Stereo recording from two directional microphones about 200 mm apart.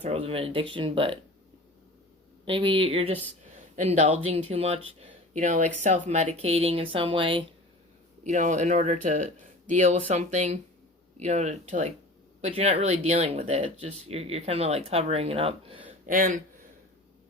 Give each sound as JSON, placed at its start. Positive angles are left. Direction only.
{"t": 0.0, "sound": "speech", "side_deg": -30}
{"t": 2.4, "sound": "speech", "side_deg": -25}
{"t": 8.2, "sound": "speech", "side_deg": -35}
{"t": 16.0, "sound": "speech", "side_deg": -40}